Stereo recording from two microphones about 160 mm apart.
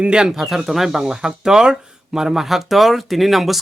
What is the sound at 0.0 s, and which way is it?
Speech, 5° right (ahead or behind).